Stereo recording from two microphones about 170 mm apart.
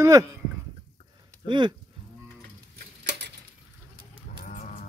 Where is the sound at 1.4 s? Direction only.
25° right (ahead or behind).